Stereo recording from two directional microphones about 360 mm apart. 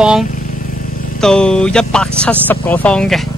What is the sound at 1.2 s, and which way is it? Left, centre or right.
Speech, centre.